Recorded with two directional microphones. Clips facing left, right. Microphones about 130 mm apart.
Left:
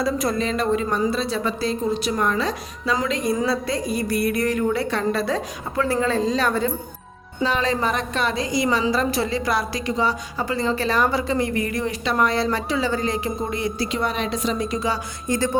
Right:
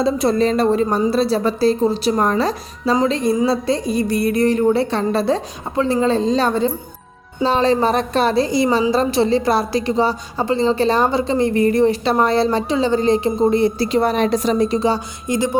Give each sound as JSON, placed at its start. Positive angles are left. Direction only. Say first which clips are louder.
{"t": 0.0, "sound": "a woman's voice", "louder": "right 6 dB", "side_deg": -25}
{"t": 15.3, "sound": "music", "louder": "right 3 dB", "side_deg": -15}